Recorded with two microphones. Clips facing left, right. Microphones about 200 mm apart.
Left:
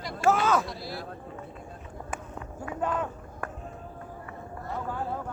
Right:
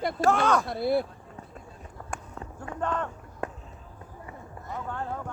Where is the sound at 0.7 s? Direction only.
55° right (ahead or behind).